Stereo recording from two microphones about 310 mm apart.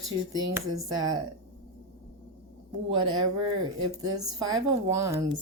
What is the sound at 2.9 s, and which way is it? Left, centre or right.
Speech, centre.